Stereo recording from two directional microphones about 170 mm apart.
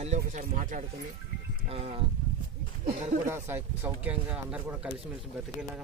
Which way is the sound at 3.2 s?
15° right (ahead or behind).